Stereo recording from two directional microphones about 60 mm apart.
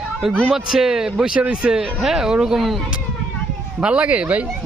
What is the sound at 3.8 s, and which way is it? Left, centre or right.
Speech, right.